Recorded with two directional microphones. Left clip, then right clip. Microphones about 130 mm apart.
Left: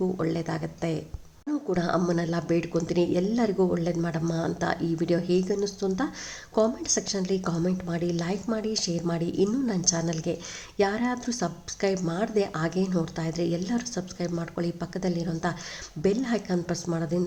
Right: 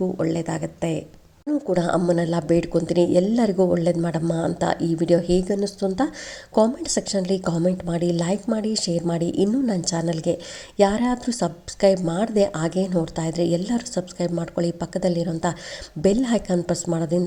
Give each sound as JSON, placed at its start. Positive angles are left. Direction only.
{"t": 0.2, "sound": "a woman's voice", "side_deg": -30}